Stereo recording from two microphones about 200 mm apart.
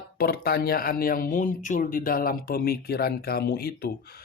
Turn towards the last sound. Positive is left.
turn(degrees=50)  # may be behind; listen again after turning